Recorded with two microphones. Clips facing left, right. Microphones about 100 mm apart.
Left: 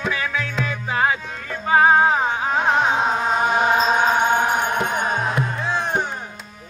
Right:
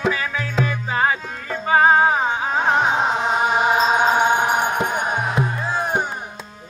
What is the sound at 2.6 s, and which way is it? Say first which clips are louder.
Carnatic music: right 1 dB; 15° right (ahead or behind).